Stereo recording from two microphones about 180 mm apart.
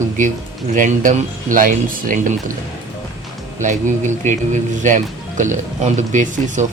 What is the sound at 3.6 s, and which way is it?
Speech, 40° right (ahead or behind).